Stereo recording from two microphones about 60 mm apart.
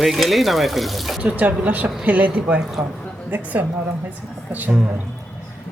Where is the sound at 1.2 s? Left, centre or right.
Right.